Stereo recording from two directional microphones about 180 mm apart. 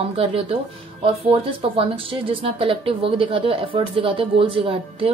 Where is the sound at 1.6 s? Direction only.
30° right (ahead or behind).